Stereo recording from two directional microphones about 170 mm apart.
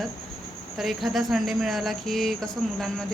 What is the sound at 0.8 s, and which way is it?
Speech, centre (ahead or behind).